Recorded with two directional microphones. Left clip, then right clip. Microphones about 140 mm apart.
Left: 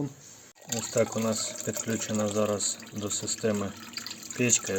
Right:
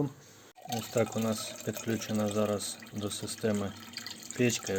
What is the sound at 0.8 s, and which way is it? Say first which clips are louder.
Speech: left 4 dB; 5° left (ahead or behind).